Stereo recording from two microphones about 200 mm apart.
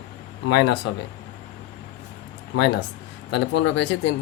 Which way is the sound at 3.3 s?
65° left (ahead or behind).